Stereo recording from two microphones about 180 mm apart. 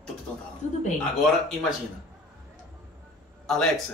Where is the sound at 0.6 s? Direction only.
40° left (ahead or behind).